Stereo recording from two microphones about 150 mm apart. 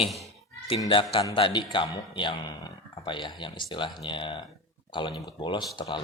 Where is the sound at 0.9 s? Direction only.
35° left (ahead or behind).